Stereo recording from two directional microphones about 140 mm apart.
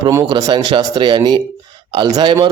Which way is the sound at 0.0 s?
25° right (ahead or behind).